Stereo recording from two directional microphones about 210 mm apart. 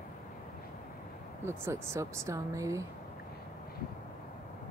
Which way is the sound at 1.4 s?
10° right (ahead or behind).